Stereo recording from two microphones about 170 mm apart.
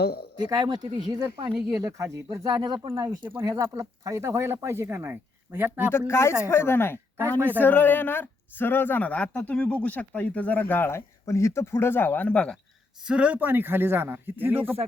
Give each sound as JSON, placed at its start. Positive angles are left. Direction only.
{"t": 0.0, "sound": "speech", "side_deg": 70}
{"t": 0.4, "sound": "speech", "side_deg": -25}
{"t": 6.1, "sound": "a woman's voice", "side_deg": 15}
{"t": 13.0, "sound": "speech", "side_deg": -5}